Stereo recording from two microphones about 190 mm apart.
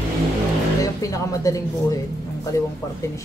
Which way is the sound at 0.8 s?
15° left (ahead or behind).